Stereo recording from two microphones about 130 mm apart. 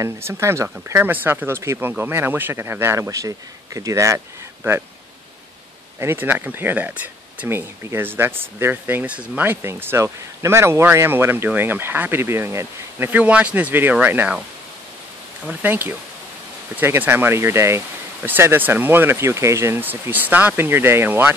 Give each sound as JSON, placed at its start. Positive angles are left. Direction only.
{"t": 0.0, "sound": "speech", "side_deg": -20}
{"t": 5.9, "sound": "speech", "side_deg": -15}
{"t": 15.4, "sound": "speech", "side_deg": -15}